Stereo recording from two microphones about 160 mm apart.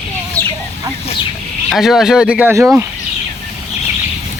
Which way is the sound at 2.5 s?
20° right (ahead or behind).